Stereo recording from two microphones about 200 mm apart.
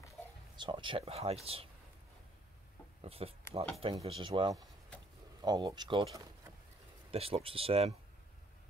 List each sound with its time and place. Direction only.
0.6 s speech: 25° right (ahead or behind)
3.0 s speech: 30° right (ahead or behind)